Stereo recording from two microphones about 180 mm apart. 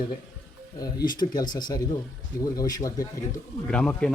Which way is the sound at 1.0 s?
25° left (ahead or behind).